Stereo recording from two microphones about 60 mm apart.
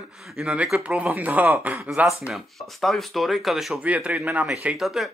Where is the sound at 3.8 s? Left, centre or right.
Right.